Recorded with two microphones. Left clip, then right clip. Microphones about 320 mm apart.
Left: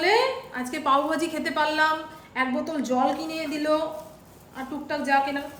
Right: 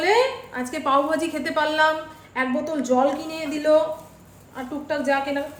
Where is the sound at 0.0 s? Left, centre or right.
Centre.